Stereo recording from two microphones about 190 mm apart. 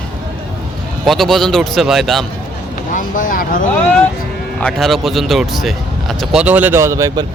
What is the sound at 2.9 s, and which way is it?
Speech, 45° left (ahead or behind).